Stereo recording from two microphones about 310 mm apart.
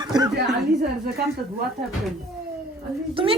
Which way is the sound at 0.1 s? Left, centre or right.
Centre.